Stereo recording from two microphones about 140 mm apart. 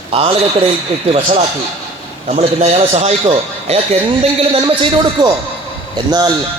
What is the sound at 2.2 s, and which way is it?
Speech, 50° right (ahead or behind).